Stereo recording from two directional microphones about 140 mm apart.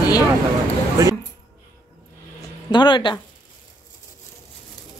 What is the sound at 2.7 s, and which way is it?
Speech, 35° left (ahead or behind).